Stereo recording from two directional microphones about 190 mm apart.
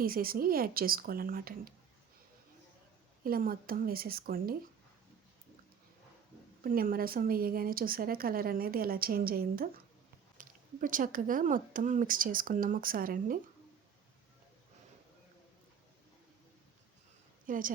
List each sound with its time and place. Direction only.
0.0 s a woman's voice: 50° right (ahead or behind)
3.2 s a woman's voice: 50° right (ahead or behind)
6.6 s a woman's voice: 50° right (ahead or behind)
17.4 s a sound: 45° right (ahead or behind)